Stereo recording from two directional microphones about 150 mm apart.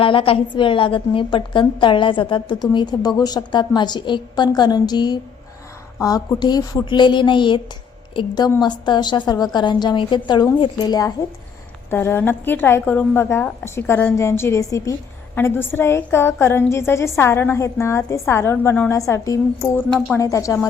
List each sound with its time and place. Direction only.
0.0 s a woman's voice: 35° left (ahead or behind)
11.9 s a woman's voice: 15° left (ahead or behind)